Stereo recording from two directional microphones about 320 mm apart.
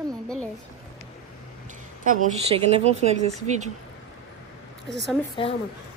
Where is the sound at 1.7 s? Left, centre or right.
Right.